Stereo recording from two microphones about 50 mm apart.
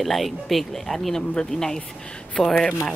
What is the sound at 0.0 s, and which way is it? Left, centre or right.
A woman's voice, centre.